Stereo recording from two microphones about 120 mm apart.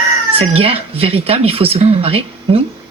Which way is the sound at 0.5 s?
50° right (ahead or behind).